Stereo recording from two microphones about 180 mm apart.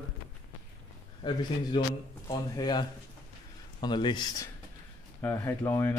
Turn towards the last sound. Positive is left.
turn(degrees=15)  # may be behind; listen again after turning